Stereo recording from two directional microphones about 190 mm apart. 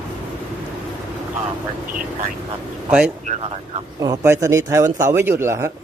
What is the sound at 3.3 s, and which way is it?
Speech, 35° right (ahead or behind).